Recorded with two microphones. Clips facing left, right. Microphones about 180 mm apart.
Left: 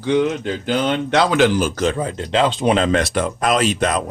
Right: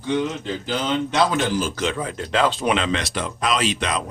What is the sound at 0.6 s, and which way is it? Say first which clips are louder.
Speech: left 4 dB; 70° left (ahead or behind).